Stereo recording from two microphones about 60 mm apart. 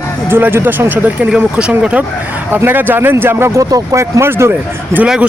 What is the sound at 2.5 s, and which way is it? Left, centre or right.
Speech, right.